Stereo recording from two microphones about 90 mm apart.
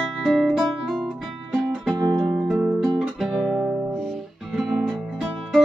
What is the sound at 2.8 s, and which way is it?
Guitar, 5° right (ahead or behind).